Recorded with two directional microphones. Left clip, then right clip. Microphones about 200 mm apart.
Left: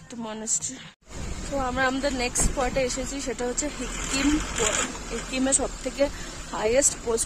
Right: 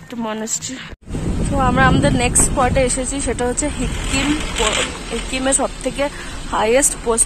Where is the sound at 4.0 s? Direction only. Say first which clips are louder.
Right 5 dB; 50° left (ahead or behind).